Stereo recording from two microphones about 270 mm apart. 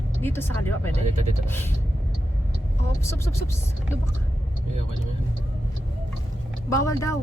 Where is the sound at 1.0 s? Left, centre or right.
Right.